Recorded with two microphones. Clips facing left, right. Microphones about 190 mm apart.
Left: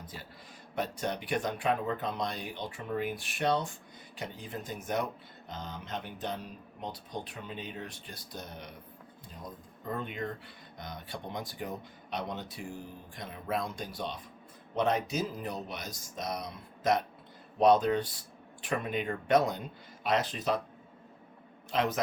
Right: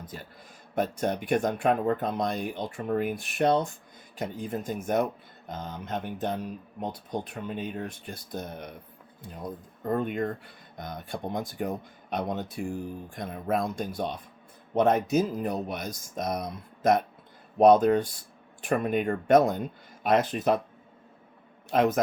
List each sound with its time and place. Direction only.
0.8 s speech: 50° right (ahead or behind)
9.8 s speech: 50° right (ahead or behind)
21.7 s speech: 50° right (ahead or behind)